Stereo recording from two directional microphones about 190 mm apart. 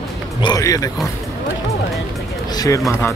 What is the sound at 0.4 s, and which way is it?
Music, 20° left (ahead or behind).